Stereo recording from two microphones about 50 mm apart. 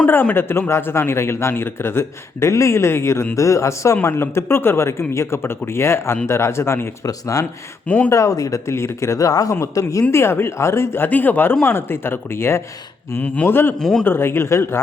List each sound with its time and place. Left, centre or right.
0.3 s speech: left
3.3 s speech: left
4.0 s speech: left
7.3 s speech: left
7.9 s speech: left
8.1 s speech: left
10.1 s speech: left
11.1 s speech: left
13.1 s speech: left
13.7 s speech: centre
14.0 s speech: left